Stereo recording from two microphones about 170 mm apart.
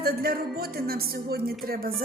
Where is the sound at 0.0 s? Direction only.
65° right (ahead or behind).